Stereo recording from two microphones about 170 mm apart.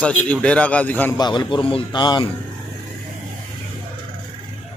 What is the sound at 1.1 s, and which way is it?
Speech, 25° left (ahead or behind).